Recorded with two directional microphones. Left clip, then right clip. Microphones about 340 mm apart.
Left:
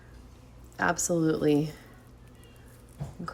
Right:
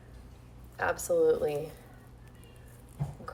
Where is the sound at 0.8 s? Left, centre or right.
Left.